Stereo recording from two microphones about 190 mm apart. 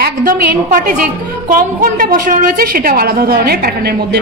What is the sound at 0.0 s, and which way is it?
A woman's voice, 50° right (ahead or behind).